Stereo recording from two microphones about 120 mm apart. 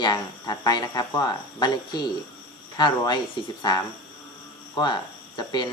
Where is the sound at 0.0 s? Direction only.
35° left (ahead or behind).